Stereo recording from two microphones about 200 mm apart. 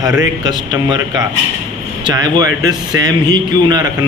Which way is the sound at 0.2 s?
20° right (ahead or behind).